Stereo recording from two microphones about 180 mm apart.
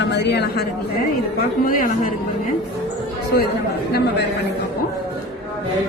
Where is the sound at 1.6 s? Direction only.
50° left (ahead or behind).